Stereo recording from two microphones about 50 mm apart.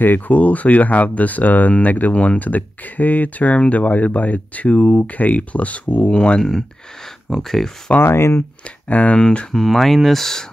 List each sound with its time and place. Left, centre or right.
0.0 s speech: left
7.2 s speech: centre
8.0 s speech: left
8.4 s speech: left
9.5 s speech: centre